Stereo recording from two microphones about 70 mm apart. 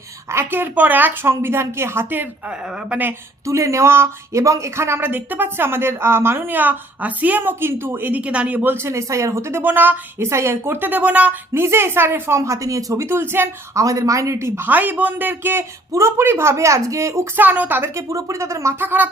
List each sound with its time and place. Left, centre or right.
0.3 s speech: right
3.4 s speech: right
8.7 s speech: right
10.2 s speech: right
11.5 s speech: right
12.4 s speech: right
13.7 s speech: right
14.7 s a man's voice: right
15.9 s speech: right
17.3 s a man's voice: right
17.9 s speech: right
18.8 s a man's voice: right